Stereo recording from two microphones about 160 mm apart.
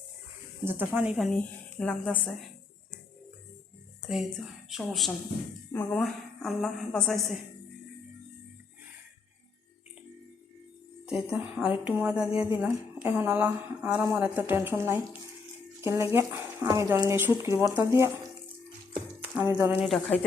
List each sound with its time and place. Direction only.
0.6 s a woman's voice: 10° right (ahead or behind); by 2.3 s 10° left (ahead or behind)
4.1 s a woman's voice: centre (ahead or behind)
11.0 s a woman's voice: 5° right (ahead or behind)
19.8 s a woman's voice: centre (ahead or behind)